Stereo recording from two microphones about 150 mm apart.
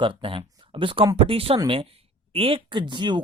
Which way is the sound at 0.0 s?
35° right (ahead or behind).